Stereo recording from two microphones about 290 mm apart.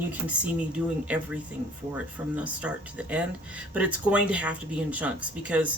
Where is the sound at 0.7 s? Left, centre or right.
Centre.